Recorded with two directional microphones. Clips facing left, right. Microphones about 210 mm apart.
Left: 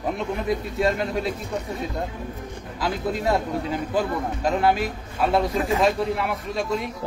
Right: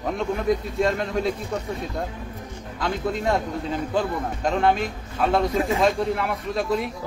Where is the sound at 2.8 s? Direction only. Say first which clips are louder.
Even; 5° left (ahead or behind).